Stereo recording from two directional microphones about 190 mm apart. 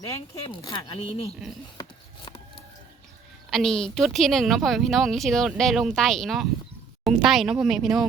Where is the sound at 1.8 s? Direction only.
20° left (ahead or behind).